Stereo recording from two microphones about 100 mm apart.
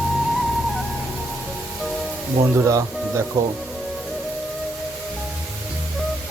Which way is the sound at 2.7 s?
30° right (ahead or behind).